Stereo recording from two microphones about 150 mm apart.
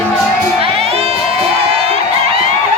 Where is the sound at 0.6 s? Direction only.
40° right (ahead or behind).